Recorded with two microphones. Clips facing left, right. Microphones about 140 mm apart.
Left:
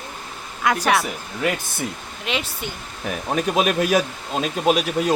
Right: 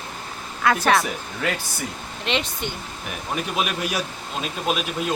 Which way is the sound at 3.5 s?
45° left (ahead or behind).